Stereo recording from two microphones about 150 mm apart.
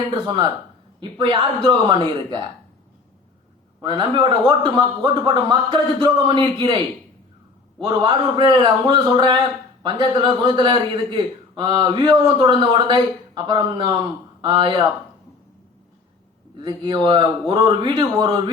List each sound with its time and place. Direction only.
0.9 s a man's voice: 30° right (ahead or behind)
3.8 s a man's voice: 30° right (ahead or behind)
7.8 s a man's voice: 30° right (ahead or behind)
16.6 s a man's voice: 30° right (ahead or behind)